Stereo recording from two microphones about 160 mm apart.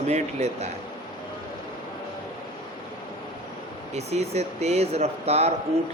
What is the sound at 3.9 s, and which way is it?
A man's voice, 40° right (ahead or behind).